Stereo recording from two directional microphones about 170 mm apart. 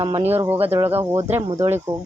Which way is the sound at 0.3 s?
10° right (ahead or behind).